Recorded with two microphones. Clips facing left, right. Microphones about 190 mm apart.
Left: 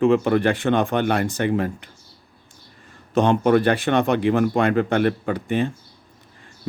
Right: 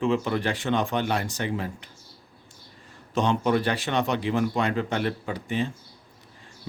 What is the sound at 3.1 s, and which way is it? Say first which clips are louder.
Speech: left 6 dB; 55° left (ahead or behind).